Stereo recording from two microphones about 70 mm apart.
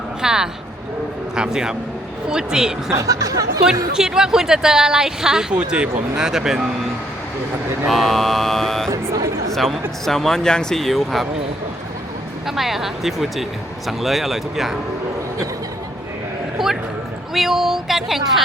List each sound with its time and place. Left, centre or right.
0.2 s speech: centre
2.9 s speech: right
3.9 s speech: centre
7.9 s speech: centre
8.9 s a sound: right
9.5 s speech: centre
12.5 s speech: centre
16.6 s a sound: centre
17.3 s speech: centre